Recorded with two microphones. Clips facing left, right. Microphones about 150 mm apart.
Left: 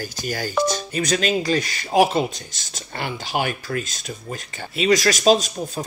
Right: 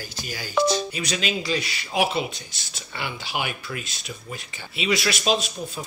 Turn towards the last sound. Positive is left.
turn(degrees=40)  # may be behind; listen again after turning